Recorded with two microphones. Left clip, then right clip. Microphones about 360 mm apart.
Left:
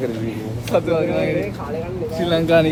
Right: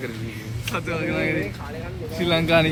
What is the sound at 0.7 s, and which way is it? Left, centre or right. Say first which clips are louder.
Speech: left 8 dB; centre.